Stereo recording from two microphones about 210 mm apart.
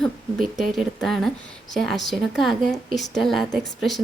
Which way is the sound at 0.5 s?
Centre (ahead or behind).